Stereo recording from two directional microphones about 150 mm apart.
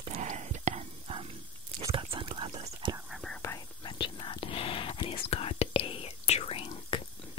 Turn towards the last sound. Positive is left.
turn(degrees=35)  # may be behind; listen again after turning